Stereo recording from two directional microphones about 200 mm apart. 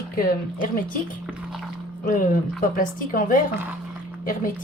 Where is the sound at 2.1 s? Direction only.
40° left (ahead or behind).